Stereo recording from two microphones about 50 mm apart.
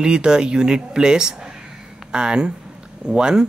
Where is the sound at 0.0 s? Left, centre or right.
Centre.